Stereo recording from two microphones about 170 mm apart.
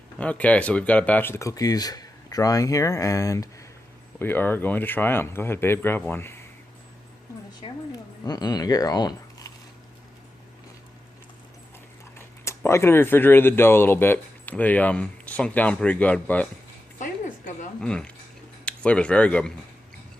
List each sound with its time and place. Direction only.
0.2 s speech: 10° left (ahead or behind)
7.6 s speech: 20° left (ahead or behind)
12.1 s speech: 15° left (ahead or behind)
17.0 s music: 50° left (ahead or behind)
17.7 s speech: 5° left (ahead or behind)